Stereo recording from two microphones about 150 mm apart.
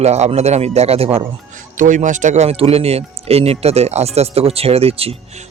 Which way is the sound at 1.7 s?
55° right (ahead or behind).